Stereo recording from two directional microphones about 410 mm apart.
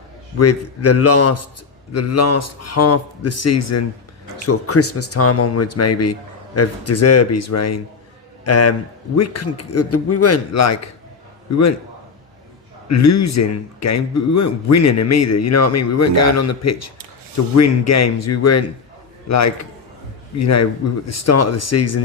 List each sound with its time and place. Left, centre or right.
0.3 s a man's voice: left
12.9 s a man's voice: left